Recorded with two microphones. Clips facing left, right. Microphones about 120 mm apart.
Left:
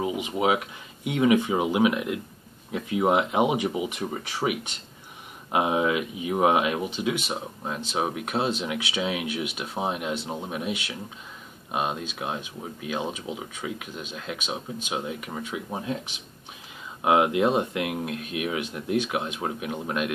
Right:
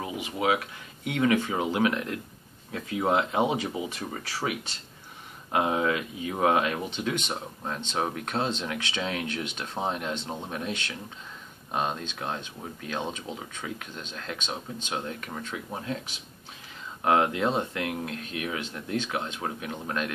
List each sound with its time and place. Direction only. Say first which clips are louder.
0.0 s speech: left 4 dB; 20° left (ahead or behind)